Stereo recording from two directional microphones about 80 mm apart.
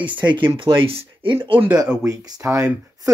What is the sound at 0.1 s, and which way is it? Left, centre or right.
Speech, right.